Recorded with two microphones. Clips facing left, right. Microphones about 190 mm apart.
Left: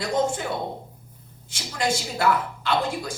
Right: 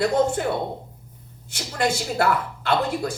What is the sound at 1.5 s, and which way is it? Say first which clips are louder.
Speech: right 2 dB; 60° right (ahead or behind).